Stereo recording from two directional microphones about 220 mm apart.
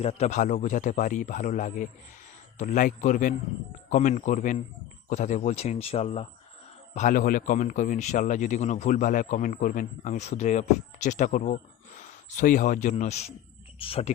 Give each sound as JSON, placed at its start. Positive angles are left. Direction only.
{"t": 0.0, "sound": "a man's voice", "side_deg": 30}